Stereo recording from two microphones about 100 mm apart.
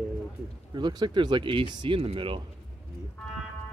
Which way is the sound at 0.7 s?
50° right (ahead or behind).